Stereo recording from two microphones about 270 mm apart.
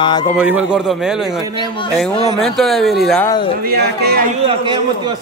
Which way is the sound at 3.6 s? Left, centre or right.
Right.